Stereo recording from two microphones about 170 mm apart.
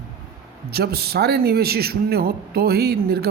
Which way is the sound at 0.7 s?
70° right (ahead or behind).